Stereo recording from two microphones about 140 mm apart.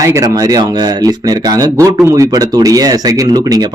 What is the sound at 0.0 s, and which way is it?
A man's voice, 20° right (ahead or behind).